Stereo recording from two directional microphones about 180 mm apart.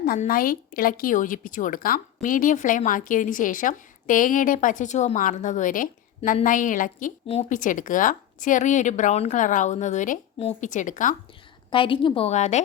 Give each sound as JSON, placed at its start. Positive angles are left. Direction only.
{"t": 0.2, "sound": "speech", "side_deg": 50}
{"t": 10.3, "sound": "a woman's voice", "side_deg": 35}
{"t": 10.7, "sound": "speech", "side_deg": 45}
{"t": 11.7, "sound": "a woman's voice", "side_deg": 30}